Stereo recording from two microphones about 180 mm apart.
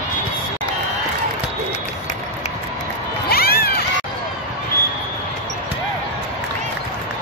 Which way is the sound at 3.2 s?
60° left (ahead or behind).